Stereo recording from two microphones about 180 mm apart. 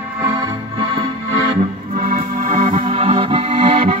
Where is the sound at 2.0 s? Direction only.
45° right (ahead or behind).